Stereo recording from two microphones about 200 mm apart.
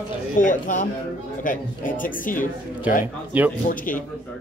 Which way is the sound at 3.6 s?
45° left (ahead or behind).